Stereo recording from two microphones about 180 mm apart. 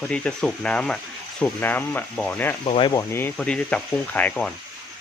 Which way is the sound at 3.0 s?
15° left (ahead or behind).